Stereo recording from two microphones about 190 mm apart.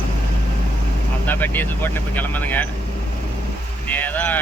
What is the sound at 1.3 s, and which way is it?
Speech, 10° left (ahead or behind).